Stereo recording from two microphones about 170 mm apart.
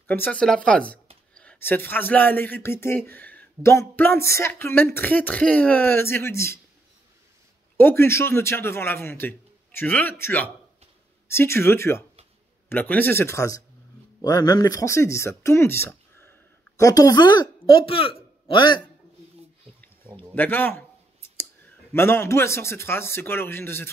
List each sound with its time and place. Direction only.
0.0 s speech: 10° left (ahead or behind)
7.7 s speech: 15° left (ahead or behind)
20.2 s speech: 10° left (ahead or behind)
21.9 s speech: 15° left (ahead or behind)